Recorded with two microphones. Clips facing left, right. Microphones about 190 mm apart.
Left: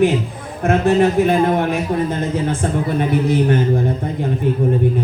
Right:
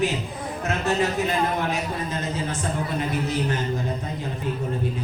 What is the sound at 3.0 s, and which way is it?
Speech, 55° left (ahead or behind).